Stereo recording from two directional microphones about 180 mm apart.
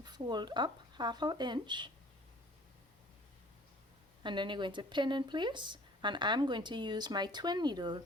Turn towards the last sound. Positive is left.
turn(degrees=-25)  # may be behind; listen again after turning